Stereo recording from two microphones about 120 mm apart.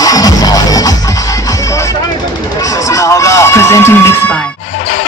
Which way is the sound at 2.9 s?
25° left (ahead or behind).